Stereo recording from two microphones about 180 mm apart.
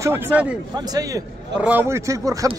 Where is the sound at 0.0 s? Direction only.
10° right (ahead or behind).